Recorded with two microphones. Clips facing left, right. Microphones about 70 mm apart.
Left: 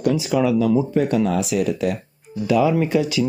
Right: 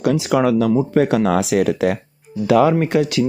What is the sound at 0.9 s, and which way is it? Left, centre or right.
Speech, right.